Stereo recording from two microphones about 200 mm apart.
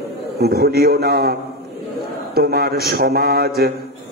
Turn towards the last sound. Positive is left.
turn(degrees=-50)  # may be behind; listen again after turning